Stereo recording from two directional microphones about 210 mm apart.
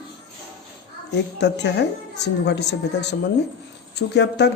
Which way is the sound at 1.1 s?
55° left (ahead or behind).